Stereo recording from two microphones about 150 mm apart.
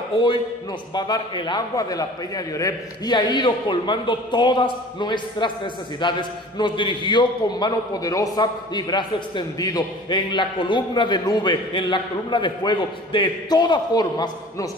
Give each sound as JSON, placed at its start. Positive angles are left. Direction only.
{"t": 0.9, "sound": "a man's voice", "side_deg": 30}